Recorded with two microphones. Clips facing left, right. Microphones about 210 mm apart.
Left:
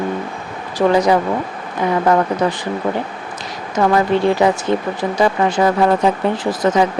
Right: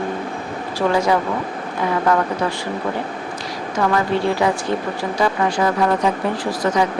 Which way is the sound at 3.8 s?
20° left (ahead or behind).